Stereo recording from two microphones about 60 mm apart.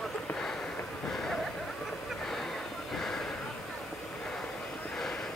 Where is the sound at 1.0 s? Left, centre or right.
Centre.